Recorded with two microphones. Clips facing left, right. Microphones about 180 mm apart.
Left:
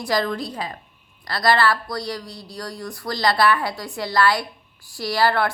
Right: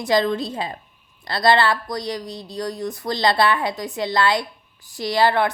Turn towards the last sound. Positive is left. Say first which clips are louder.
# right 2 dB
turn(degrees=-20)  # may be behind; listen again after turning